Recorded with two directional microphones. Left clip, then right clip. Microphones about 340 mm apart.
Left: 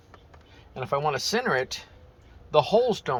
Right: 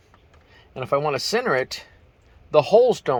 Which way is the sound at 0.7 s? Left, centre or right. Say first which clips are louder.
Right 4 dB; centre.